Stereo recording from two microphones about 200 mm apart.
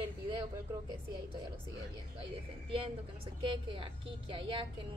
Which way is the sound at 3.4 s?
25° right (ahead or behind).